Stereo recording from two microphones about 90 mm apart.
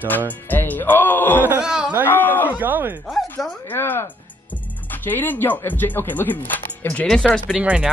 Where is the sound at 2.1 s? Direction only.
20° left (ahead or behind).